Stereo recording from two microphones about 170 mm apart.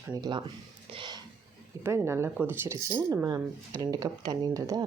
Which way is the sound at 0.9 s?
25° right (ahead or behind).